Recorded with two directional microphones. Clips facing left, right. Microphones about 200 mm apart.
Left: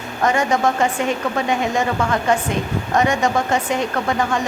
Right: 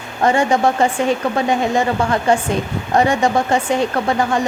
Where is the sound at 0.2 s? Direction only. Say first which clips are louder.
Right 3 dB; 30° right (ahead or behind).